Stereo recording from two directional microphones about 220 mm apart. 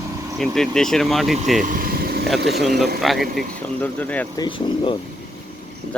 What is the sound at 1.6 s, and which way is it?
Vehicle, 40° right (ahead or behind).